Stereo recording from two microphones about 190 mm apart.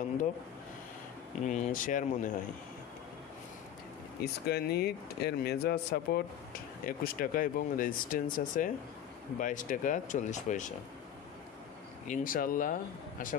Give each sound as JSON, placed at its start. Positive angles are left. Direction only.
{"t": 1.4, "sound": "speech", "side_deg": 40}
{"t": 4.2, "sound": "speech", "side_deg": 55}
{"t": 12.1, "sound": "speech", "side_deg": 45}